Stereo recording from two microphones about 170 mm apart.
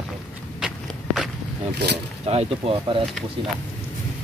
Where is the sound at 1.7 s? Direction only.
80° right.